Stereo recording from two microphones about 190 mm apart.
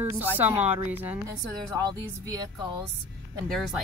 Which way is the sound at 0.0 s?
15° right (ahead or behind).